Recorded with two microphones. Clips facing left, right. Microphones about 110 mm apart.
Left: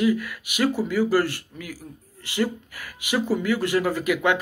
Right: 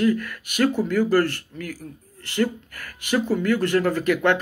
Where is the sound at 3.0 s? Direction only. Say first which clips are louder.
Right 2 dB; 10° left (ahead or behind).